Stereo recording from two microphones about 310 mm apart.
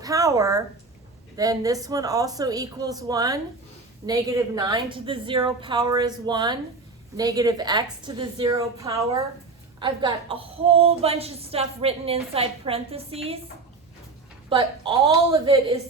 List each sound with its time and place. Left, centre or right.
0.0 s a woman's voice: centre
14.5 s a woman's voice: centre